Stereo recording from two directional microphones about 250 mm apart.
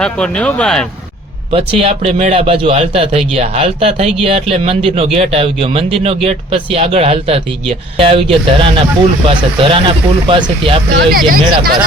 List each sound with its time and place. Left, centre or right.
0.0 s speech: centre
1.5 s a man's voice: right
10.9 s speech: right